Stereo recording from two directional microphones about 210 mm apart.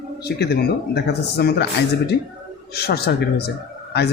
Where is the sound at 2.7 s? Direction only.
50° left (ahead or behind).